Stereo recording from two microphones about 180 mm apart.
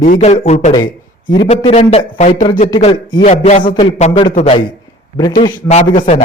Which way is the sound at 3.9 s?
40° left (ahead or behind).